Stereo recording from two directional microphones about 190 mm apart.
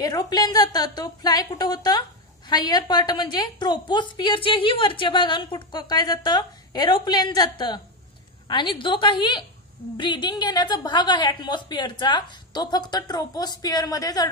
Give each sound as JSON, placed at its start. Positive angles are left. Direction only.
{"t": 0.0, "sound": "a woman's voice", "side_deg": 20}